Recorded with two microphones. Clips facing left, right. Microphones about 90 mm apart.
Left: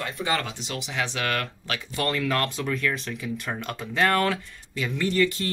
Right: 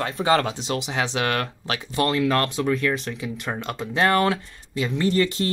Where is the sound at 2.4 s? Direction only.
35° right (ahead or behind).